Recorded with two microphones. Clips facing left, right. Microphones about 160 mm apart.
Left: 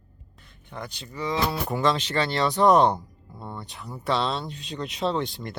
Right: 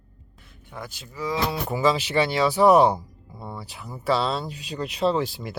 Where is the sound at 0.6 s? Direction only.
5° right (ahead or behind).